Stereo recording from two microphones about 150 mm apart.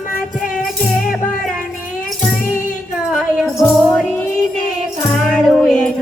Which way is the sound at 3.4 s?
Centre (ahead or behind).